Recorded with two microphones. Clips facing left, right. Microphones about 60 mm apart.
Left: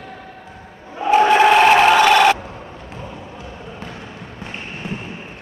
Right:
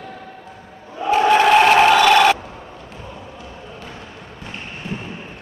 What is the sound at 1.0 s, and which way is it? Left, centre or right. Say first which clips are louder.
Crowd: left 2 dB; centre.